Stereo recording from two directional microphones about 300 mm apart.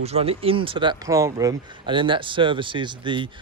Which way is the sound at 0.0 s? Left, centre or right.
Centre.